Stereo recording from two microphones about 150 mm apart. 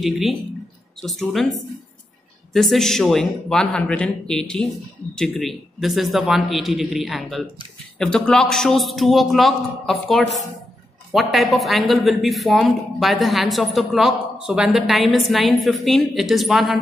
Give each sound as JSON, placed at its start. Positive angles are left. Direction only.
{"t": 0.0, "sound": "speech", "side_deg": 0}
{"t": 2.5, "sound": "speech", "side_deg": 0}